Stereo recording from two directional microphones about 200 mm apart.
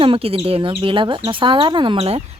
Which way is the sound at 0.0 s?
30° right (ahead or behind).